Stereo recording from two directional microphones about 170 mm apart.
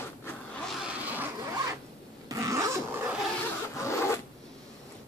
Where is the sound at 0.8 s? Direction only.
10° right (ahead or behind).